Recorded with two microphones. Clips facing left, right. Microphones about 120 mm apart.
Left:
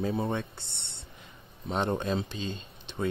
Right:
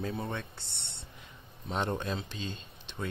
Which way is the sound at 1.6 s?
5° left (ahead or behind).